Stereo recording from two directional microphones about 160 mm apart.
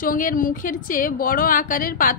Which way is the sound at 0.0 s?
60° left (ahead or behind).